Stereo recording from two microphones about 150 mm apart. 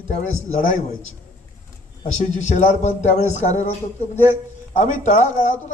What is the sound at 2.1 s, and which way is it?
A man's voice, 55° left (ahead or behind).